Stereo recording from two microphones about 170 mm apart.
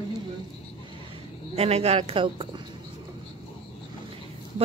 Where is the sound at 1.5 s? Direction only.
35° right (ahead or behind).